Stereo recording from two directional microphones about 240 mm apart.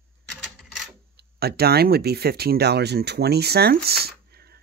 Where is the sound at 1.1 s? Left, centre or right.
Right.